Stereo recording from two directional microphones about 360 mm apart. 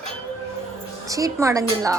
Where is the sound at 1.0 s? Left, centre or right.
Centre.